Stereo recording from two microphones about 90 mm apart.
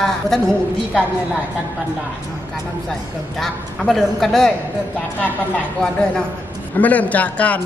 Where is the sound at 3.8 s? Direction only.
5° left (ahead or behind).